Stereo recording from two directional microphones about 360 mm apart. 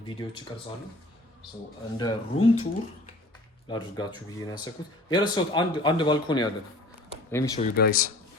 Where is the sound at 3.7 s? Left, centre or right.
Centre.